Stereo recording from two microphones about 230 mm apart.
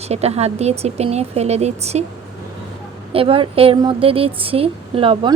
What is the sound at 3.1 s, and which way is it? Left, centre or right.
Speech, right.